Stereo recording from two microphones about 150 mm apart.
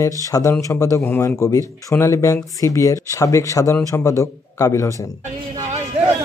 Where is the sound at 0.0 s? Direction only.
20° left (ahead or behind).